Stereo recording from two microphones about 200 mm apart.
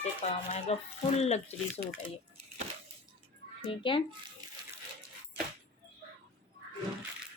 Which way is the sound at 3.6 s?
25° left (ahead or behind).